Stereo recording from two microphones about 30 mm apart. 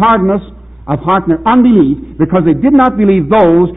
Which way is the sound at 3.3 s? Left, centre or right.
Centre.